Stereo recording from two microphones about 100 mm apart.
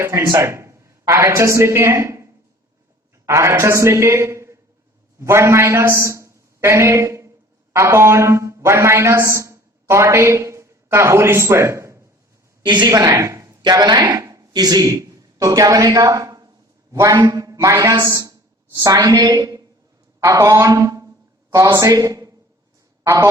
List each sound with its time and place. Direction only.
0.0 s a woman's voice: 30° right (ahead or behind)
12.6 s a woman's voice: 50° right (ahead or behind)
12.9 s speech: 35° right (ahead or behind)
13.6 s a man's voice: 45° right (ahead or behind)
19.0 s a woman's voice: 45° right (ahead or behind)